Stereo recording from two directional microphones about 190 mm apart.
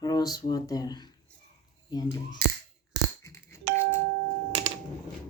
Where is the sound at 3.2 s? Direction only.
15° left (ahead or behind).